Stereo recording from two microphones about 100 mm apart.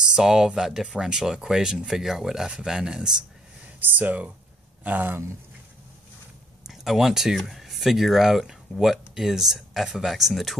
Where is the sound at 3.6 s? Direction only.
15° right (ahead or behind).